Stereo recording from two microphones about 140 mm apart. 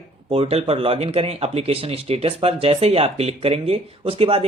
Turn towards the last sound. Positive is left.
turn(degrees=-45)  # may be behind; listen again after turning